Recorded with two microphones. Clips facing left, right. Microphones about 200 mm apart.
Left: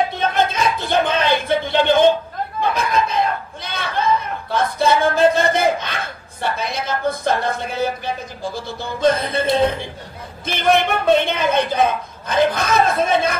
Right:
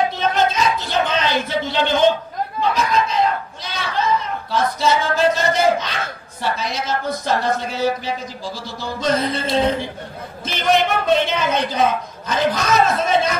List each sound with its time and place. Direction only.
0.2 s a sound: 55° left (ahead or behind)
2.7 s chatter: 55° left (ahead or behind)
6.4 s speech: 55° left (ahead or behind)